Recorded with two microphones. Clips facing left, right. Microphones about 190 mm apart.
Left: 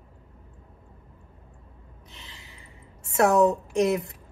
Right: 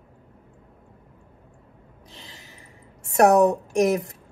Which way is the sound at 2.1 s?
40° right (ahead or behind).